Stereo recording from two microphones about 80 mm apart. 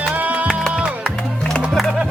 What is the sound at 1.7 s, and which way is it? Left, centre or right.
Music, centre.